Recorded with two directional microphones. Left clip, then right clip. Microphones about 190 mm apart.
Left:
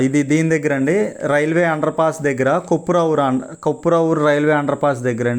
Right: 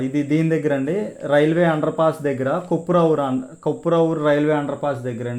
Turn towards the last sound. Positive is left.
turn(degrees=25)  # may be behind; listen again after turning